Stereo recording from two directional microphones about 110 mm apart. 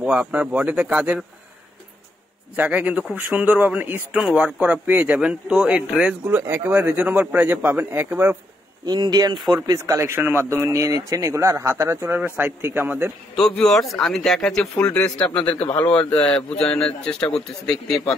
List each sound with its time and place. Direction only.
0.0 s speech: 10° right (ahead or behind)
2.5 s speech: 15° right (ahead or behind)
8.8 s speech: 40° right (ahead or behind)
9.9 s speech: 20° right (ahead or behind)
13.6 s a man's voice: 5° left (ahead or behind)